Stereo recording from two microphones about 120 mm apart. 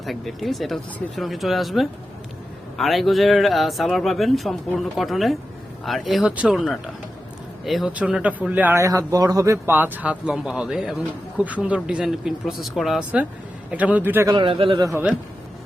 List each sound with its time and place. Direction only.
0.0 s speech: centre (ahead or behind)
7.6 s speech: centre (ahead or behind)
8.8 s speech: 25° right (ahead or behind)
14.4 s a man's voice: 45° right (ahead or behind)
14.8 s a man's voice: 25° right (ahead or behind)